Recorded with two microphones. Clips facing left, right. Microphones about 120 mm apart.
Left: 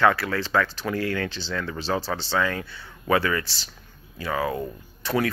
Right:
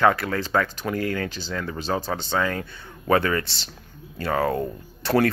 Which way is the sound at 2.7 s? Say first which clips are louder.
Right 2 dB; 45° right (ahead or behind).